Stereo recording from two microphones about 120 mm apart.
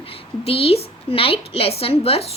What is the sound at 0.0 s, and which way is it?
A woman's voice, 50° left (ahead or behind).